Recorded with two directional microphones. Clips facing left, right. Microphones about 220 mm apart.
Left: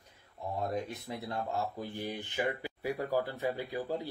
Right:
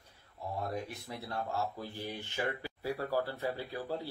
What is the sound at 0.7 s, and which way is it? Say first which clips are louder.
Speech: left 3 dB; 20° left (ahead or behind).